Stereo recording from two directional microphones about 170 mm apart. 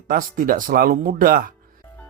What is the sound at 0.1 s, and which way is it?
Speech, 55° right (ahead or behind).